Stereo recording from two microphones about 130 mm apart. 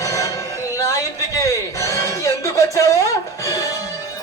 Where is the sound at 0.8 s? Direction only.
25° left (ahead or behind).